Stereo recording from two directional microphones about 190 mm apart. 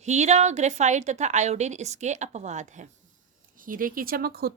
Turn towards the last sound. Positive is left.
turn(degrees=-55)  # may be behind; listen again after turning